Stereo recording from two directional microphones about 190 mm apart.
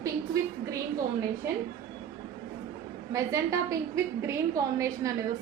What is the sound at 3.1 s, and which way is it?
A woman's voice, 15° right (ahead or behind).